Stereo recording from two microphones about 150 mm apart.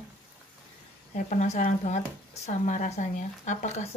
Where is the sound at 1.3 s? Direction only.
50° left (ahead or behind).